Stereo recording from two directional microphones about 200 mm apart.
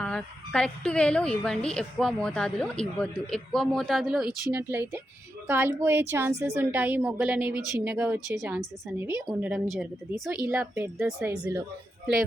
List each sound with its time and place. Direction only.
0.0 s a woman's voice: 5° left (ahead or behind)